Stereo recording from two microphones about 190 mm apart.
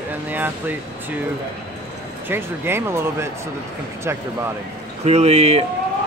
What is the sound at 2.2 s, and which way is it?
Speech, 10° right (ahead or behind).